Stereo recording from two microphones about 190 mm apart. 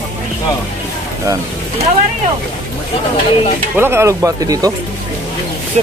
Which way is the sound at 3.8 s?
15° right (ahead or behind).